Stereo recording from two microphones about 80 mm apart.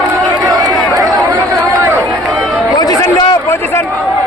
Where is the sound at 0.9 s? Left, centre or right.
Right.